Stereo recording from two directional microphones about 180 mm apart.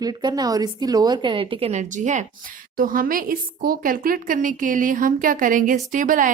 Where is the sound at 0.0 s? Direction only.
25° right (ahead or behind).